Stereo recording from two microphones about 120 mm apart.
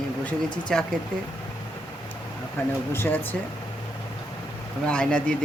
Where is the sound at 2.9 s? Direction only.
15° left (ahead or behind).